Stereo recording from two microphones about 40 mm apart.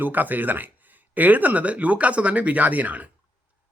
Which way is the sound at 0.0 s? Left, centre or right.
Right.